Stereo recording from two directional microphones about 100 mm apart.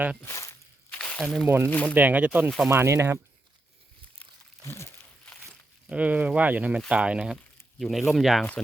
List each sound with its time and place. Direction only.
0.3 s speech: 30° left (ahead or behind)
0.9 s a sound: 15° left (ahead or behind)
1.2 s speech: 5° left (ahead or behind)
1.5 s speech: 25° right (ahead or behind)
1.7 s speech: 10° left (ahead or behind)
2.0 s speech: 15° right (ahead or behind)
2.6 s speech: 30° right (ahead or behind)
4.6 s speech: 30° left (ahead or behind)
5.9 s speech: 15° right (ahead or behind)
7.8 s speech: centre (ahead or behind)